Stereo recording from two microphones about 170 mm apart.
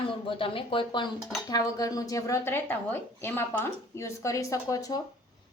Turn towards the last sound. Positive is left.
turn(degrees=20)  # may be behind; listen again after turning